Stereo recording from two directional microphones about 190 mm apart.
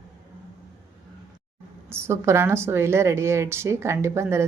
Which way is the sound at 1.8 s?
15° right (ahead or behind).